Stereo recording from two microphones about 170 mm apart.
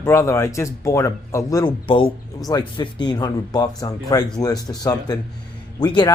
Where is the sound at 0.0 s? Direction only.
15° left (ahead or behind).